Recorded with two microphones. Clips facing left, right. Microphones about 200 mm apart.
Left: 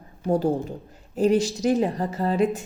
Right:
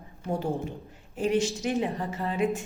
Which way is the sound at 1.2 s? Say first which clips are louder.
Left 5 dB; 35° left (ahead or behind).